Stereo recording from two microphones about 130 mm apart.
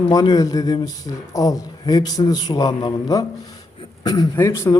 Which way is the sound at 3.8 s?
35° left (ahead or behind).